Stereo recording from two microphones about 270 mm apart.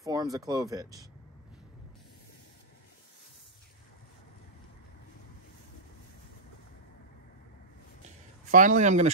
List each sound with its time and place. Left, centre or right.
0.0 s a sound: centre
0.5 s speech: centre
8.5 s speech: right